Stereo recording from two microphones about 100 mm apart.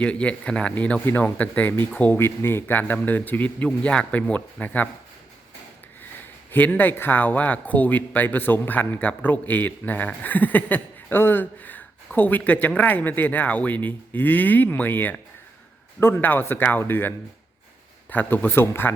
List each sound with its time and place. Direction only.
0.0 s speech: 10° left (ahead or behind)
6.5 s speech: 15° left (ahead or behind)